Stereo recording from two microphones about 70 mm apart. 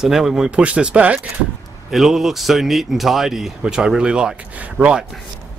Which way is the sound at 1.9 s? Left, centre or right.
Centre.